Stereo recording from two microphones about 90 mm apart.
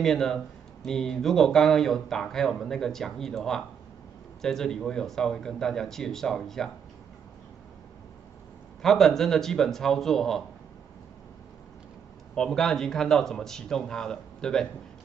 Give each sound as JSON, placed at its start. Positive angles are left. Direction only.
{"t": 0.0, "sound": "speech", "side_deg": 5}
{"t": 8.8, "sound": "speech", "side_deg": 5}
{"t": 12.4, "sound": "speech", "side_deg": 5}